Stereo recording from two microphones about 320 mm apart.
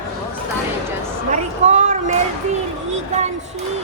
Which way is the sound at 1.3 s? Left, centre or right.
Right.